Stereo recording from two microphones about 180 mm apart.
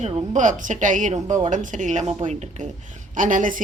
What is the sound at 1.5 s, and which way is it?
Speech, 45° right (ahead or behind).